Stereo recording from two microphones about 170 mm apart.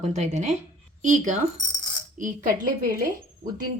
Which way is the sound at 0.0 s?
40° right (ahead or behind).